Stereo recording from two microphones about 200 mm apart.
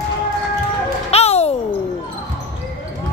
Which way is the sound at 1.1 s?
30° left (ahead or behind).